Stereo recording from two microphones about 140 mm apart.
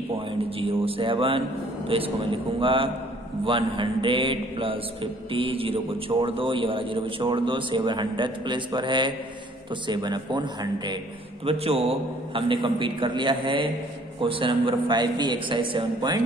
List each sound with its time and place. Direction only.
0.4 s a man's voice: 40° right (ahead or behind)
11.4 s a man's voice: 45° right (ahead or behind)